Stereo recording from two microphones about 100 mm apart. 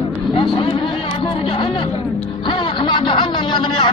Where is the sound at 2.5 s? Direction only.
55° left (ahead or behind).